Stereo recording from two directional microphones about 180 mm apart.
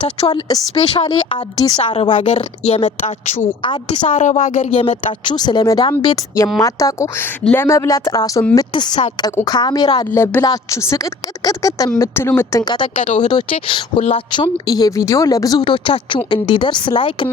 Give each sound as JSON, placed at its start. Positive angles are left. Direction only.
{"t": 0.3, "sound": "a woman's voice", "side_deg": 20}
{"t": 3.6, "sound": "speech", "side_deg": 25}
{"t": 4.1, "sound": "a woman's voice", "side_deg": 40}
{"t": 4.7, "sound": "speech", "side_deg": 30}